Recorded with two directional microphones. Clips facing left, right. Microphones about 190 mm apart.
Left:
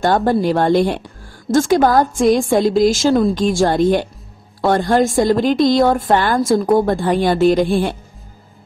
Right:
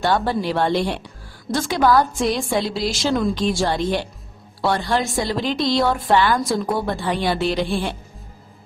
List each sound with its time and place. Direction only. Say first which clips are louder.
0.0 s a woman's voice: left 5 dB; 50° left (ahead or behind)